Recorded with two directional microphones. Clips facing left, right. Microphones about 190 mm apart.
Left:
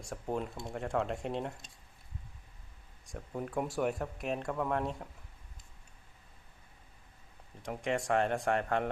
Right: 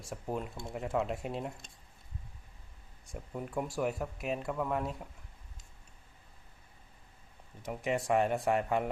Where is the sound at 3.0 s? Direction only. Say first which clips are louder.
Left 1 dB; centre (ahead or behind).